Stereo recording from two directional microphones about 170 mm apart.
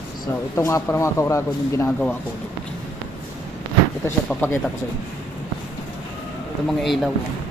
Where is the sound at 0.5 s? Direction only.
15° left (ahead or behind).